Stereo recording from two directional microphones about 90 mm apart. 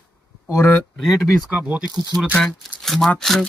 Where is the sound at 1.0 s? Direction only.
Centre (ahead or behind).